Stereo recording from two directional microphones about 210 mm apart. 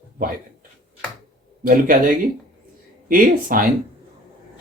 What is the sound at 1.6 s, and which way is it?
Speech, 40° right (ahead or behind).